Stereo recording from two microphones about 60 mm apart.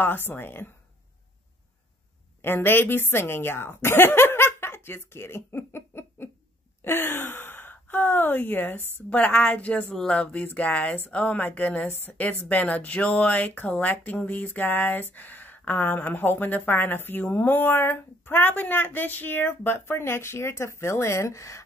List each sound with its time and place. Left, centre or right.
0.0 s speech: left
2.4 s a woman's voice: left